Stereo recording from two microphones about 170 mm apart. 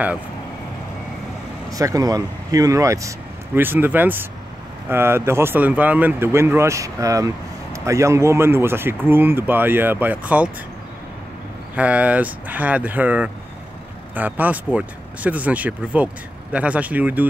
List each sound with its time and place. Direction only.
1.7 s speech: 20° right (ahead or behind)
11.7 s speech: 10° right (ahead or behind)